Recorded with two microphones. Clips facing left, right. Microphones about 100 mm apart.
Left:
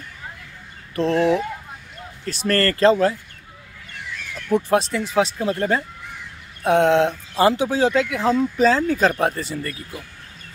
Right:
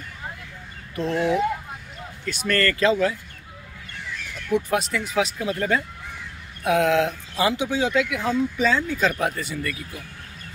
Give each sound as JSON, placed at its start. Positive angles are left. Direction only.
{"t": 0.9, "sound": "speech", "side_deg": 35}
{"t": 4.5, "sound": "speech", "side_deg": 35}
{"t": 9.1, "sound": "speech", "side_deg": 35}